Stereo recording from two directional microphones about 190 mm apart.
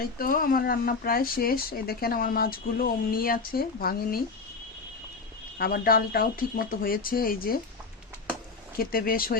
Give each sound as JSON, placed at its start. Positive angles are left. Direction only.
{"t": 0.0, "sound": "speech", "side_deg": 50}
{"t": 5.5, "sound": "speech", "side_deg": 50}
{"t": 8.8, "sound": "speech", "side_deg": 50}